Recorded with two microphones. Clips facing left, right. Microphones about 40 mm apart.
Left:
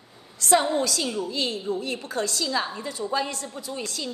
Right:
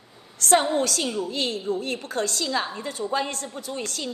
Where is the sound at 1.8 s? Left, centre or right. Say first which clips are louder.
Right 1 dB; right.